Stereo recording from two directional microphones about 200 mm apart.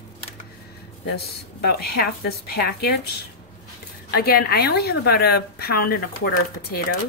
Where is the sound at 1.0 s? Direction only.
55° left (ahead or behind).